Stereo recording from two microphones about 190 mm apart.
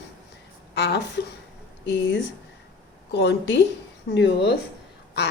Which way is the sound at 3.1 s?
65° left (ahead or behind).